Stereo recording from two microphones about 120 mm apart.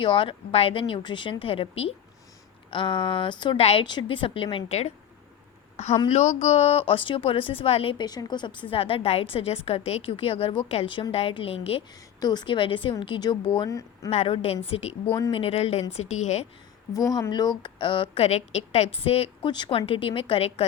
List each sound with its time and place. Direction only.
0.0 s a woman's voice: 45° left (ahead or behind)
2.6 s a woman's voice: 45° left (ahead or behind)
3.6 s a woman's voice: 60° left (ahead or behind)
3.8 s a woman's voice: 40° left (ahead or behind)
4.5 s a woman's voice: 65° left (ahead or behind)
7.9 s a woman's voice: 35° left (ahead or behind)
8.7 s a woman's voice: 50° left (ahead or behind)
12.2 s a woman's voice: 35° left (ahead or behind)
13.7 s speech: 25° left (ahead or behind)
14.1 s a woman's voice: 60° left (ahead or behind)
16.9 s a woman's voice: 30° left (ahead or behind); by 18.3 s 45° left (ahead or behind)
18.3 s a woman's voice: 65° left (ahead or behind)
19.5 s a woman's voice: 40° left (ahead or behind)